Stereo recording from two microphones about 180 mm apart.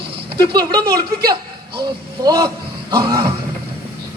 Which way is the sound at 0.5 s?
25° right (ahead or behind).